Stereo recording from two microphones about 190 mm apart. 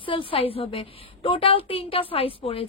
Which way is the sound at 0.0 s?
30° left (ahead or behind).